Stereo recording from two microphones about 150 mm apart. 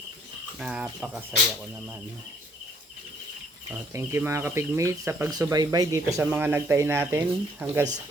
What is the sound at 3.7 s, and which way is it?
Speech, 15° right (ahead or behind).